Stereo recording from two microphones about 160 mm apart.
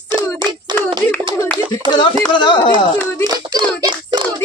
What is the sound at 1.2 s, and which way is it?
Clapping, 30° right (ahead or behind).